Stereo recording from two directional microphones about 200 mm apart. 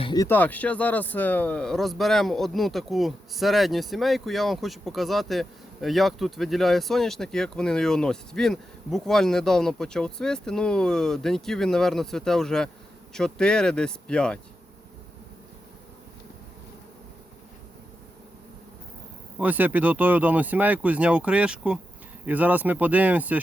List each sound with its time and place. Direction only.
0.0 s a sound: 20° left (ahead or behind)
0.3 s speech: 10° left (ahead or behind)
19.4 s speech: 10° right (ahead or behind)